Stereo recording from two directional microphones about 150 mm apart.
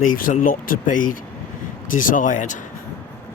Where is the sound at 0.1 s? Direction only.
65° left (ahead or behind).